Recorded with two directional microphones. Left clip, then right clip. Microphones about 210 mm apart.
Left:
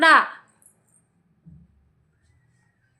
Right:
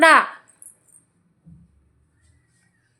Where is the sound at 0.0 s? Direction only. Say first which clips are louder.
Right 2 dB; 20° right (ahead or behind).